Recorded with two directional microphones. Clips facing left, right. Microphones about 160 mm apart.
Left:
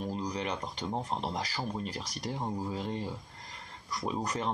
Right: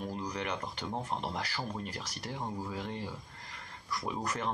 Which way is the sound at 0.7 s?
20° left (ahead or behind).